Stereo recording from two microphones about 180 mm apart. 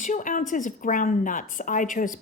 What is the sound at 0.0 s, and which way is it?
A woman's voice, 45° left (ahead or behind).